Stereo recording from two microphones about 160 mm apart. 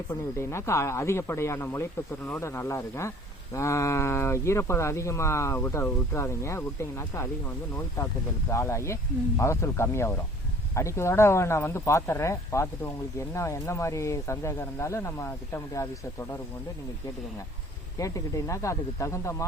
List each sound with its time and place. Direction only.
0.1 s speech: 15° left (ahead or behind)
17.9 s speech: 20° left (ahead or behind)